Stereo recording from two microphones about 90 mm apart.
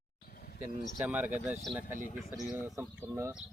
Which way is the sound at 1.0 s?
20° right (ahead or behind).